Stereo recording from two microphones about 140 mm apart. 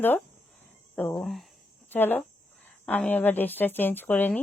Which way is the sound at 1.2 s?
Centre (ahead or behind).